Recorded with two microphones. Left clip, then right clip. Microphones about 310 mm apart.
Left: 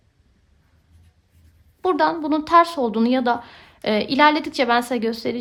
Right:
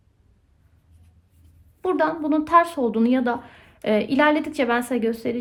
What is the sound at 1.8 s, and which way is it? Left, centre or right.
A woman's voice, centre.